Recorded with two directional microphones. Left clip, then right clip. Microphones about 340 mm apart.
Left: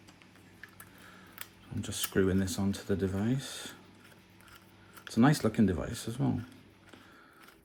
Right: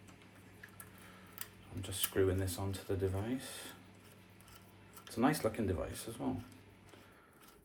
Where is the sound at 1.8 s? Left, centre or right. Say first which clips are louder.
Left 4 dB; left.